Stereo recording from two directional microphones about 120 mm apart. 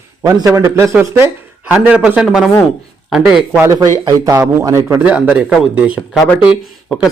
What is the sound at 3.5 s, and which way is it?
A man's voice, 25° right (ahead or behind).